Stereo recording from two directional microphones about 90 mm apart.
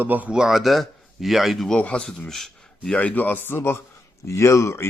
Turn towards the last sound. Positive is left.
turn(degrees=35)  # may be behind; listen again after turning